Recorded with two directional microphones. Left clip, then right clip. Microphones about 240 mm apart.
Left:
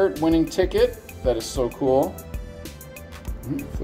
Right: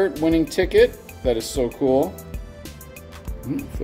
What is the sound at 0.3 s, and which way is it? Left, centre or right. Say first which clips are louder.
Speech: right 1 dB; right.